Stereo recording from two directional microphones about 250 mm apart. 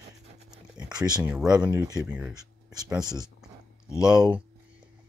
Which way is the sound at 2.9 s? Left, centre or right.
Centre.